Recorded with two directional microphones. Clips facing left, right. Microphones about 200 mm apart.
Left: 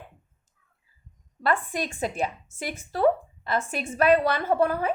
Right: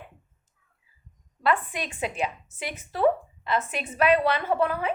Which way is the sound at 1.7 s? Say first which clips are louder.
Left 2 dB; 40° left (ahead or behind).